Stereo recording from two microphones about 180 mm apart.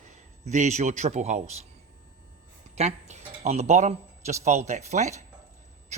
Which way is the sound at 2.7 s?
40° right (ahead or behind).